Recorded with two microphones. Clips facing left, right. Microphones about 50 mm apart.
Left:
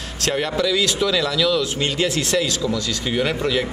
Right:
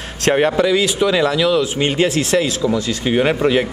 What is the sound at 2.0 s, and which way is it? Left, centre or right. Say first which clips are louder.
Speech: right 3 dB; centre.